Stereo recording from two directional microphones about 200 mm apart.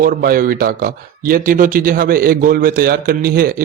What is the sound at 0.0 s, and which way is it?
A man's voice, 45° right (ahead or behind).